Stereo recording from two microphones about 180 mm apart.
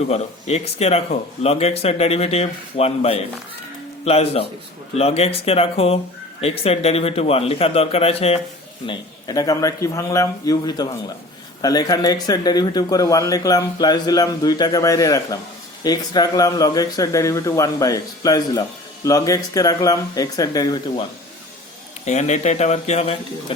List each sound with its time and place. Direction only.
0.1 s speech: 35° left (ahead or behind)
8.9 s speech: 20° left (ahead or behind)
22.0 s speech: 40° left (ahead or behind)